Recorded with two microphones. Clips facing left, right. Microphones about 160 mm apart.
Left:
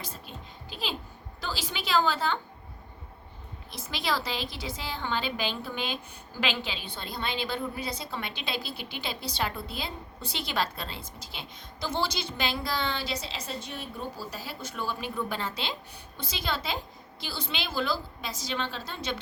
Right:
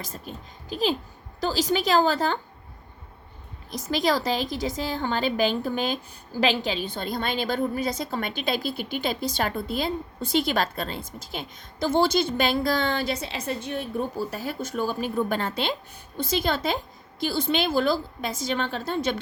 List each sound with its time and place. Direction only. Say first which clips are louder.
0.0 s a woman's voice: right 4 dB; 45° right (ahead or behind)
3.7 s a woman's voice: right 8 dB; 45° right (ahead or behind)